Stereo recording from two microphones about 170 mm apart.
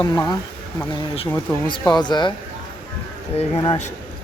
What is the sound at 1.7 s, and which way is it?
Speech, 25° left (ahead or behind).